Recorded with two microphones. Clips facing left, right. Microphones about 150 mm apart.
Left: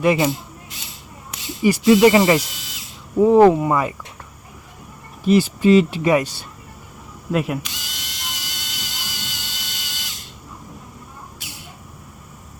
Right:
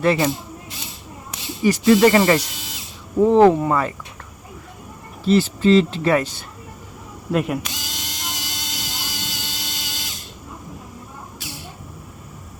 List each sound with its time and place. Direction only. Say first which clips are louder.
0.0 s speech: left 1 dB; 15° left (ahead or behind)
1.6 s speech: left 1 dB; 10° left (ahead or behind)
5.2 s speech: left 1 dB; 15° left (ahead or behind)
7.3 s speech: even; centre (ahead or behind)
7.6 s ratchet: right 4 dB; 40° right (ahead or behind)